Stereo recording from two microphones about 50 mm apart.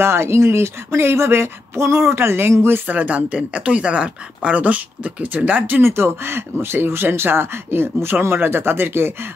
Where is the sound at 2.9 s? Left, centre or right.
Right.